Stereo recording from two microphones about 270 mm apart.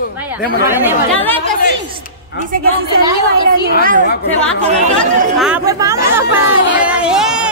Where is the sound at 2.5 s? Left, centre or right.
Right.